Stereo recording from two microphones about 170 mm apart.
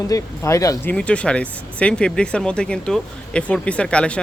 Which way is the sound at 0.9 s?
5° left (ahead or behind).